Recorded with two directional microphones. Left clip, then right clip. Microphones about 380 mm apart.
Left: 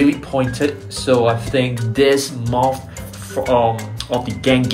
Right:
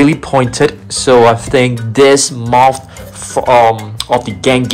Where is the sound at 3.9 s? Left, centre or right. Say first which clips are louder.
Right 8 dB; centre.